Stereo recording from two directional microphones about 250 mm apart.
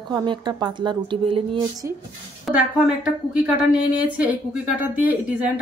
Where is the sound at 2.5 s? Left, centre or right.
Centre.